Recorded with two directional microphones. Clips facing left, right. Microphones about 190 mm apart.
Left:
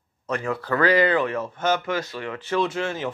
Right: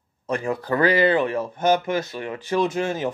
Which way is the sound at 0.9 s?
25° right (ahead or behind).